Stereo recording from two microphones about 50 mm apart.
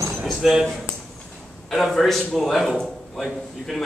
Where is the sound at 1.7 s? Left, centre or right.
Centre.